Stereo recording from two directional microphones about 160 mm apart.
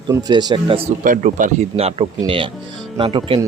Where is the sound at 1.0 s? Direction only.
55° right (ahead or behind).